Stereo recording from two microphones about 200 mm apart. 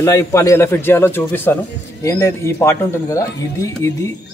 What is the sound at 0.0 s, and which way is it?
Speech, 15° left (ahead or behind).